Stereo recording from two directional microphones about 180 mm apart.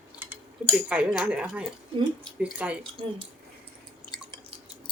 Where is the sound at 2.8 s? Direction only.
30° right (ahead or behind).